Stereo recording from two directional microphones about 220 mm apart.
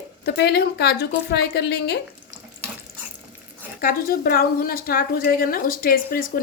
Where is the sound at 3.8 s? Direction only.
40° left (ahead or behind).